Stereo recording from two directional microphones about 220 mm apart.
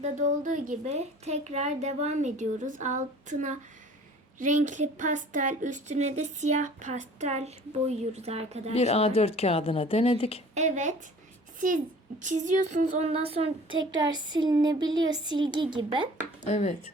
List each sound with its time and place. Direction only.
0.0 s speech: 35° right (ahead or behind)
8.7 s speech: 30° left (ahead or behind)
10.5 s speech: 35° right (ahead or behind)
12.2 s a sound: 35° right (ahead or behind)
16.5 s speech: 30° left (ahead or behind)